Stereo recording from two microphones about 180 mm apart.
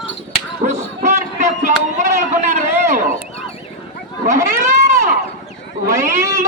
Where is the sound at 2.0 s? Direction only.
40° right (ahead or behind).